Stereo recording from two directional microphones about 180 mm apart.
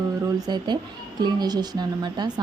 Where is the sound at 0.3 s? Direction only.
25° right (ahead or behind).